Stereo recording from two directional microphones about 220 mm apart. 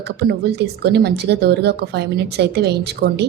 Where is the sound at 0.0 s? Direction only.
50° right (ahead or behind).